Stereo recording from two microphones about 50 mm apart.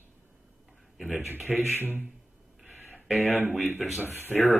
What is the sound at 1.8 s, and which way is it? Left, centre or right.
Speech, right.